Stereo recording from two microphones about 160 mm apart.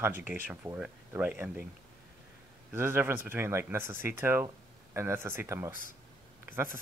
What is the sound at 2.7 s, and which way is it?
Speech, 15° right (ahead or behind).